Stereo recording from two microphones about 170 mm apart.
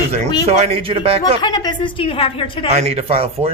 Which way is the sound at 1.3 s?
25° left (ahead or behind).